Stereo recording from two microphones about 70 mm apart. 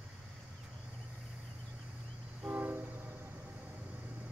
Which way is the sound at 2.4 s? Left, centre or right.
Right.